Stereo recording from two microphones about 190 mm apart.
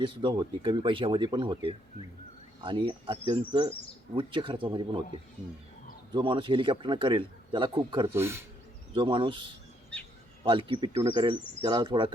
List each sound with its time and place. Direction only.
0.0 s a man's voice: 25° right (ahead or behind)
6.1 s a man's voice: 25° right (ahead or behind)
8.1 s speech: 15° right (ahead or behind)
9.0 s a man's voice: 25° right (ahead or behind)